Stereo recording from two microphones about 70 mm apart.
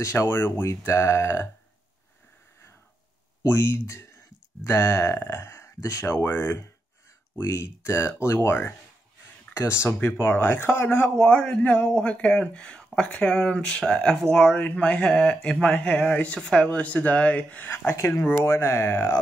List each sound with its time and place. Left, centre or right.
0.0 s speech: left
3.5 s speech: left
4.6 s speech: left
8.5 s speech: left
9.5 s speech: left
11.1 s speech: centre; by 17.9 s left
17.9 s speech: left
18.2 s speech: left